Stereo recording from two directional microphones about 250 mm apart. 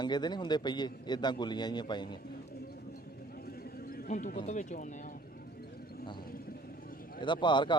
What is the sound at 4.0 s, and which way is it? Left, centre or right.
Speech, left.